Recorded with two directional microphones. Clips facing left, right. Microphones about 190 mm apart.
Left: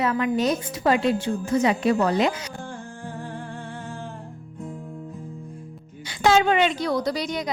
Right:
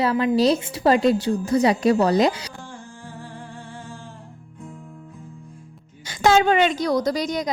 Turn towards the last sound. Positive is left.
turn(degrees=-40)  # may be behind; listen again after turning